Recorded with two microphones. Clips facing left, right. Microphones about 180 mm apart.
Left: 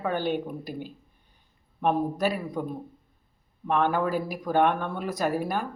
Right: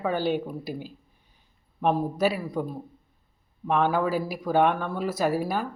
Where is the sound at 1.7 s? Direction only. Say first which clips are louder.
Right 1 dB; 5° right (ahead or behind).